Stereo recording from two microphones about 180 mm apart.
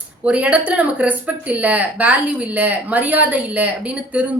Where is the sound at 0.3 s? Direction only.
5° right (ahead or behind).